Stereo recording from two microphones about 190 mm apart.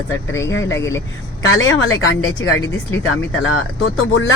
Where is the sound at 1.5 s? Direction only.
90° left.